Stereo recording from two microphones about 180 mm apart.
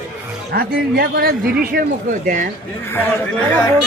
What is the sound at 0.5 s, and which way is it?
Speech, 60° right (ahead or behind).